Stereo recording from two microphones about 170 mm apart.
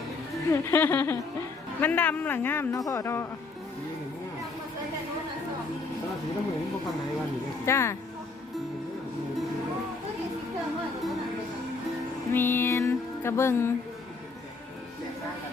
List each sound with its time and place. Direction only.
0.5 s speech: 15° left (ahead or behind)
7.6 s speech: 15° left (ahead or behind)
12.3 s music: 15° left (ahead or behind)